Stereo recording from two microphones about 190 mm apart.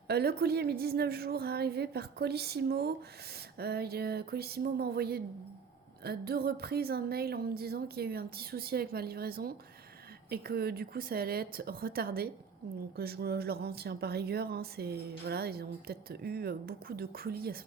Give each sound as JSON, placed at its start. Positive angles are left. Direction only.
{"t": 0.1, "sound": "speech", "side_deg": -55}